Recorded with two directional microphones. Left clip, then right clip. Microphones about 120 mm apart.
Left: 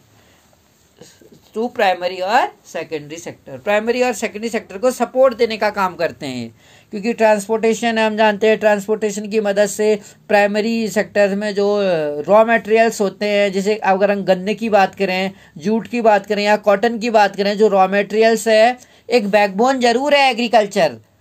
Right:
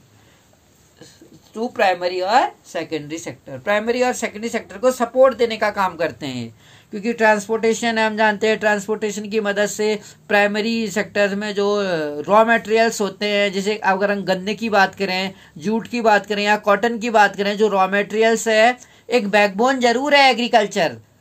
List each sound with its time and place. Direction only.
1.5 s a woman's voice: 90° left; by 20.9 s 40° left (ahead or behind)